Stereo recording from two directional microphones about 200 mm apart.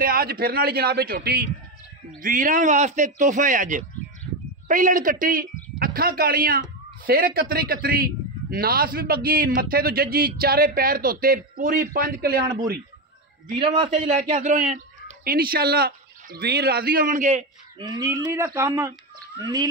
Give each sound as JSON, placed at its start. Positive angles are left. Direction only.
{"t": 0.0, "sound": "a man's voice", "side_deg": -50}
{"t": 13.6, "sound": "a man's voice", "side_deg": -25}
{"t": 13.8, "sound": "a man's voice", "side_deg": -35}
{"t": 17.7, "sound": "speech", "side_deg": -20}